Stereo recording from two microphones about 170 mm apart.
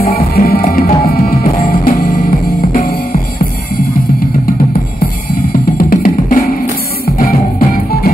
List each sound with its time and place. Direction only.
0.0 s music: 60° left (ahead or behind)
5.5 s drum: 55° left (ahead or behind)
7.2 s music: 60° left (ahead or behind)